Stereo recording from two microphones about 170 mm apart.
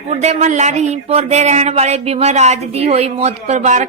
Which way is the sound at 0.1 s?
40° right (ahead or behind).